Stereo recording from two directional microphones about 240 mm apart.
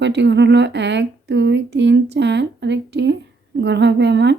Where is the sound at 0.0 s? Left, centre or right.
Right.